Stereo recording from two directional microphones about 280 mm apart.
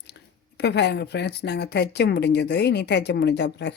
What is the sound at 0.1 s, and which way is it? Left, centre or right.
Speech, left.